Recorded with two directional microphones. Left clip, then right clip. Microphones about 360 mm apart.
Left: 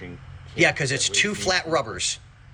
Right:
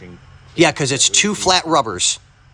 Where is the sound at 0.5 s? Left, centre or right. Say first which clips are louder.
Right 5 dB; centre.